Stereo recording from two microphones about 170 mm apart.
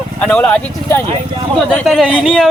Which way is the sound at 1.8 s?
Centre (ahead or behind).